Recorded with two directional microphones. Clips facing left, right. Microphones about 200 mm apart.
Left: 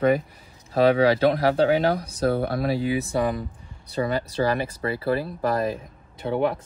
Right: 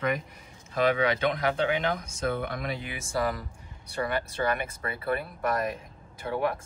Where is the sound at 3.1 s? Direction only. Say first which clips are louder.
Left 5 dB; 15° left (ahead or behind).